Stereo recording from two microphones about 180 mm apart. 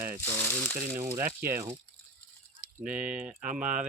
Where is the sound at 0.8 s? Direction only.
10° right (ahead or behind).